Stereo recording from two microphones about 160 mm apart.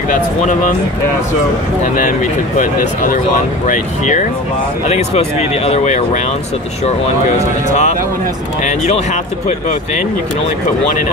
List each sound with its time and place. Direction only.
3.6 s speech: 50° left (ahead or behind)
7.3 s speech: 45° left (ahead or behind)